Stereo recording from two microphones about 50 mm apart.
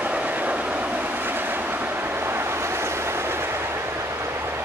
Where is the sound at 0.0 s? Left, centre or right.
Right.